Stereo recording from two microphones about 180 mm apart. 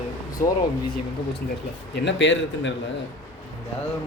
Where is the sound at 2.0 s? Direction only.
90° left.